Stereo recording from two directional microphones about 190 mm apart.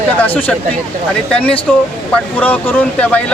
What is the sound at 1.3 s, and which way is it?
Speech, 5° left (ahead or behind).